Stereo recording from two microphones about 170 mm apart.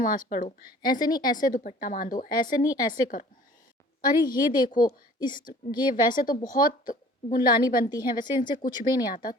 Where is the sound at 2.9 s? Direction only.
55° left (ahead or behind).